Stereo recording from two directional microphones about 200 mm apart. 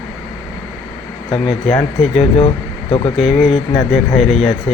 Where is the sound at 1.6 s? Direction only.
5° left (ahead or behind).